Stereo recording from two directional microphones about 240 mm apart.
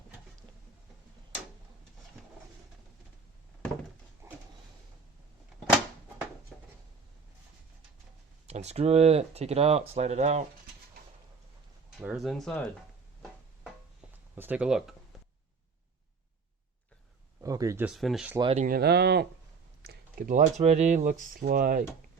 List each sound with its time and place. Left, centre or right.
4.2 s a sound: centre
6.5 s a sound: centre
8.4 s speech: right
11.9 s speech: centre
14.3 s speech: centre
17.4 s speech: centre
18.3 s speech: right